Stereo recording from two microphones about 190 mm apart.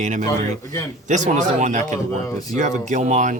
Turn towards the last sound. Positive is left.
turn(degrees=-40)  # may be behind; listen again after turning